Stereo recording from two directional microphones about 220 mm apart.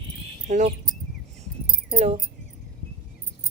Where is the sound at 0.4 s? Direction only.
30° right (ahead or behind).